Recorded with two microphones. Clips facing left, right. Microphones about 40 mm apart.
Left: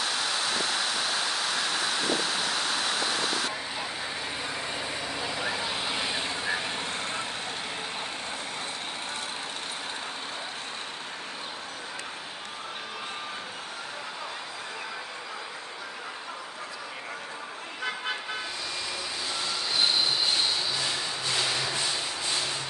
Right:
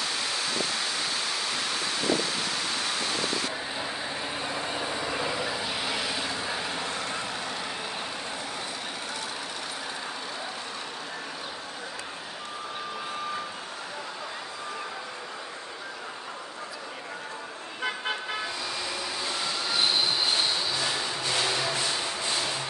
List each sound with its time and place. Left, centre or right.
5.1 s vehicle: centre
5.4 s vehicle: centre; by 7.2 s left
20.3 s a sound: centre